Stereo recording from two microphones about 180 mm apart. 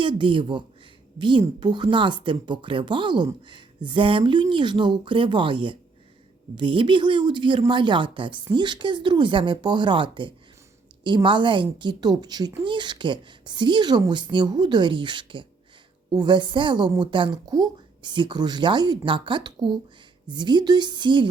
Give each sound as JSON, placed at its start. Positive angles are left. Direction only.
{"t": 0.0, "sound": "a woman's voice", "side_deg": -25}